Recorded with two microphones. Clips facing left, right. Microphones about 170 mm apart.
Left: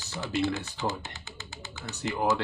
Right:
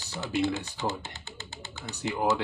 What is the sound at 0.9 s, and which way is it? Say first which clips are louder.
Typewriter: even; 30° right (ahead or behind).